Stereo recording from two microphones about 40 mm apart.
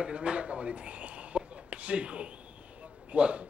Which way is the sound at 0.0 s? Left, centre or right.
Right.